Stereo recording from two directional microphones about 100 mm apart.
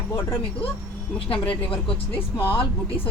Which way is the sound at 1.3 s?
60° left (ahead or behind).